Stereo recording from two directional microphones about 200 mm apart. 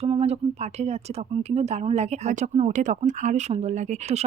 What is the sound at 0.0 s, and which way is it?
Speech, 30° right (ahead or behind).